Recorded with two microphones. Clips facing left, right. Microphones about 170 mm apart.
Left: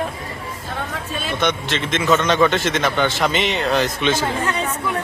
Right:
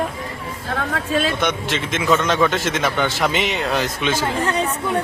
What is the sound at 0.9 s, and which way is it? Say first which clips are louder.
Speech: right 7 dB; 90° right.